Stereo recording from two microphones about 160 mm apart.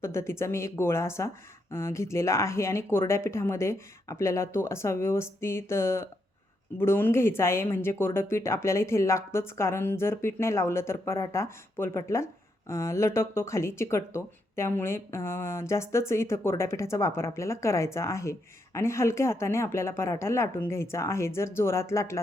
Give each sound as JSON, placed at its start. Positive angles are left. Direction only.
{"t": 0.0, "sound": "speech", "side_deg": 15}